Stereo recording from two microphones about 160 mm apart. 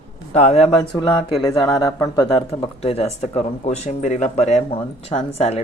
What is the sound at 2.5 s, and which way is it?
Speech, 40° left (ahead or behind).